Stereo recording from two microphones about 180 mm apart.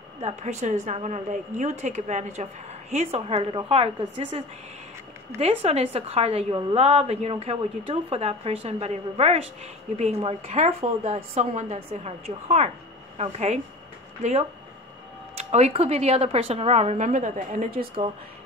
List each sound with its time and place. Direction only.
0.2 s a woman's voice: 40° right (ahead or behind)
5.4 s a woman's voice: 35° right (ahead or behind)
15.3 s a woman's voice: 35° right (ahead or behind)